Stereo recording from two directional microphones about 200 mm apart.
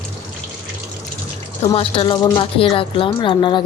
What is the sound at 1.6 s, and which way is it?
A woman's voice, 30° left (ahead or behind).